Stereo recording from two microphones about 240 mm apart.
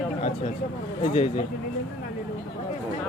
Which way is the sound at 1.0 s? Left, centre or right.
Left.